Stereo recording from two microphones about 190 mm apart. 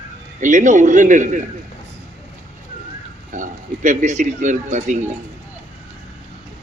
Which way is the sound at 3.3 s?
45° right (ahead or behind).